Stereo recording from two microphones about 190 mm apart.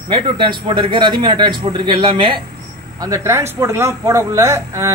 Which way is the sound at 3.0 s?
15° right (ahead or behind).